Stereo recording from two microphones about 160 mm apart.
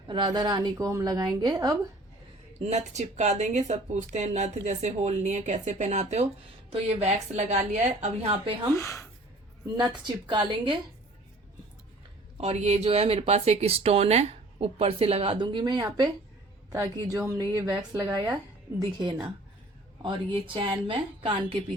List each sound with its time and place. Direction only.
0.1 s speech: 25° right (ahead or behind)
2.6 s speech: 45° right (ahead or behind)
8.7 s speech: 20° left (ahead or behind)
9.9 s speech: 30° right (ahead or behind)
12.4 s speech: 40° right (ahead or behind)